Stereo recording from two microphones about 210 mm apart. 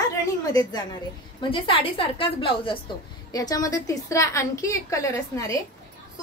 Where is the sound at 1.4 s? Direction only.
25° left (ahead or behind).